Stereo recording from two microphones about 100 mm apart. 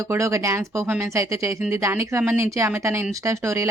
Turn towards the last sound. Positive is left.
turn(degrees=-30)  # may be behind; listen again after turning